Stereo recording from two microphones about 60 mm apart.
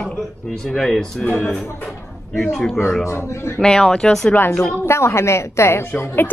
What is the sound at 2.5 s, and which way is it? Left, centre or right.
Speech, centre.